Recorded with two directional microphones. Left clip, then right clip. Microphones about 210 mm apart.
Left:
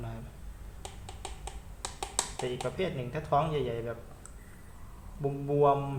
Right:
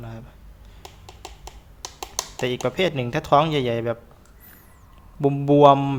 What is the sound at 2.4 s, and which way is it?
Speech, 50° right (ahead or behind).